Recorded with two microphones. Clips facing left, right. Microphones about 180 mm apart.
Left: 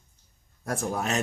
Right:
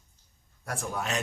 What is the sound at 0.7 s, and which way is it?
Speech, 40° left (ahead or behind).